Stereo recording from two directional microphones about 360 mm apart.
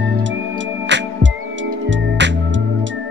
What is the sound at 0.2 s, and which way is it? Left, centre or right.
Music, right.